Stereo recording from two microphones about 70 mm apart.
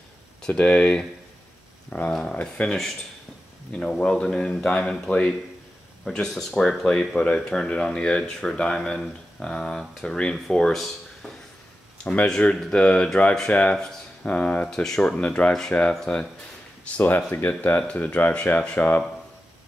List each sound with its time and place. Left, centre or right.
0.4 s speech: centre
13.5 s speech: centre
14.7 s speech: centre
16.8 s speech: centre